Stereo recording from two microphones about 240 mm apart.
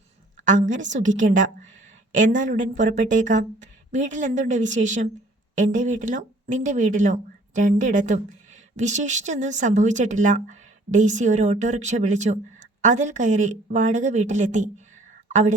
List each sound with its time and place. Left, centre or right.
0.3 s speech: right